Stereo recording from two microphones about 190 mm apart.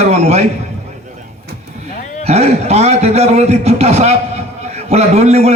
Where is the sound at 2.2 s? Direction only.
35° right (ahead or behind).